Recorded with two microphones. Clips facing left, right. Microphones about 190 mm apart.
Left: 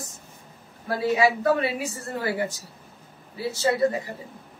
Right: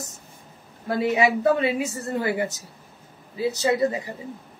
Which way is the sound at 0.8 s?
20° right (ahead or behind).